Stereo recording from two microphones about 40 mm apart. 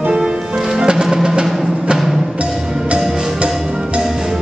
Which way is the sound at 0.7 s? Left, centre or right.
Centre.